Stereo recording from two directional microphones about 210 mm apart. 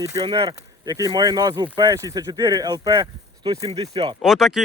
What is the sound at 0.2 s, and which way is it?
Speech, 25° right (ahead or behind).